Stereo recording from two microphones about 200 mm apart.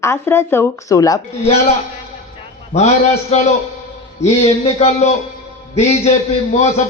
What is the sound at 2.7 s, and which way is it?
Speech, 30° left (ahead or behind).